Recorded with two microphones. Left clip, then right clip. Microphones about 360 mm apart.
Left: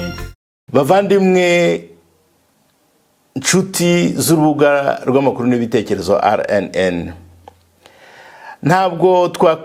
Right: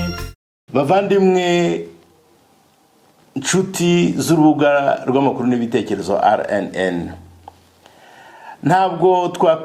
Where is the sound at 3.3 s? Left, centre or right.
Left.